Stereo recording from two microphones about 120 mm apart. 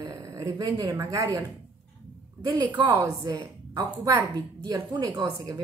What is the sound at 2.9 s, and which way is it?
A woman's voice, 30° right (ahead or behind).